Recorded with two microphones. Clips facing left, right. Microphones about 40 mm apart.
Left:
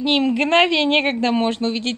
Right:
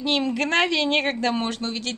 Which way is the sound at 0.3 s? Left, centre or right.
Left.